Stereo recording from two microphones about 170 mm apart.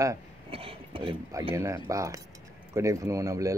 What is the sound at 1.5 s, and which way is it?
Speech, 15° right (ahead or behind).